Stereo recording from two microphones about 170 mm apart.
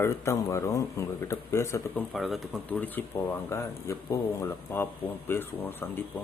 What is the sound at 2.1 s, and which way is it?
Speech, centre (ahead or behind).